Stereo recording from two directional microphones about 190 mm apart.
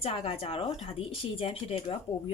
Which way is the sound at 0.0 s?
30° left (ahead or behind).